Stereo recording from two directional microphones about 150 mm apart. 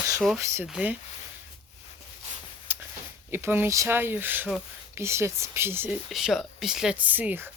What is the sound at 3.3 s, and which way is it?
Speech, 15° right (ahead or behind).